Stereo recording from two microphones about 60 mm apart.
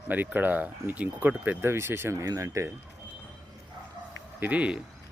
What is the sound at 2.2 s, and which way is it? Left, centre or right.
Speech, right.